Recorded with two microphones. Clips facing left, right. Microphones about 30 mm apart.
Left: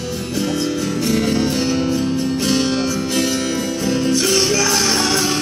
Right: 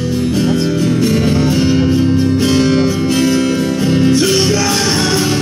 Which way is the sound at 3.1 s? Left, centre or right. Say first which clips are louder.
Right 7 dB; right.